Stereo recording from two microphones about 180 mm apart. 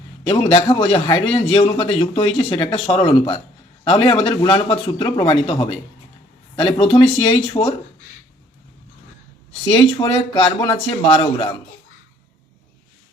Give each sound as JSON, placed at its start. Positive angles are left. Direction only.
{"t": 0.3, "sound": "a man's voice", "side_deg": 30}
{"t": 9.6, "sound": "a man's voice", "side_deg": 30}